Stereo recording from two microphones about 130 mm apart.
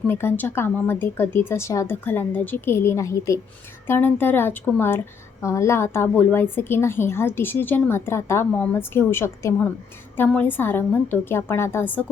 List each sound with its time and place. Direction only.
0.1 s speech: 20° left (ahead or behind)